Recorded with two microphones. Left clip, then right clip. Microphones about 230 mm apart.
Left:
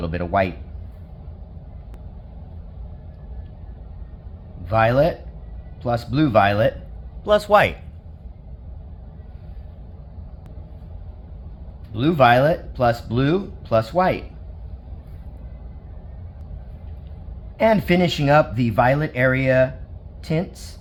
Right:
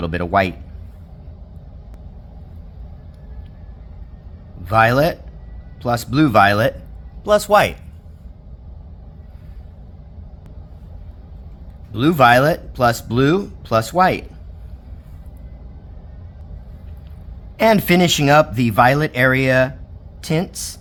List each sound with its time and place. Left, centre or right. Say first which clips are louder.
0.0 s speech: right 4 dB; right
4.6 s speech: right 3 dB; right
11.9 s speech: right 3 dB; right
17.6 s speech: right 3 dB; right